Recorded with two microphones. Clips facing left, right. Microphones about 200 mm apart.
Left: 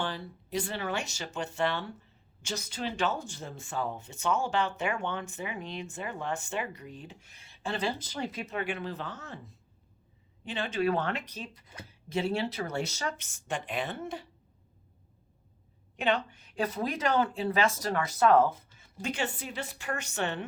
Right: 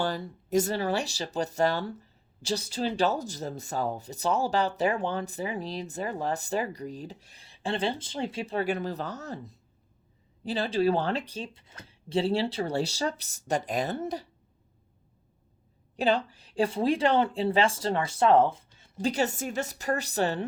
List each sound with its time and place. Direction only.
0.0 s speech: 45° right (ahead or behind)
16.0 s speech: 35° right (ahead or behind)